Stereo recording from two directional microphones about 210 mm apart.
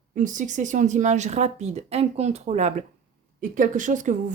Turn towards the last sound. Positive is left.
turn(degrees=-35)  # may be behind; listen again after turning